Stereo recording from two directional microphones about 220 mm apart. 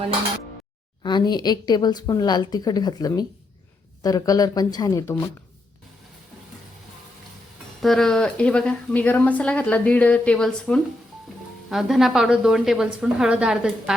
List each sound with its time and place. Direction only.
1.0 s a woman's voice: 20° left (ahead or behind)
7.8 s a woman's voice: centre (ahead or behind)